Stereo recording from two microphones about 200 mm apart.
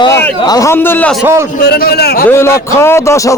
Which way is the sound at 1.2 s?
10° right (ahead or behind).